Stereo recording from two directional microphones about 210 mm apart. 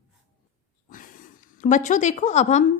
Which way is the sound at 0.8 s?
40° left (ahead or behind).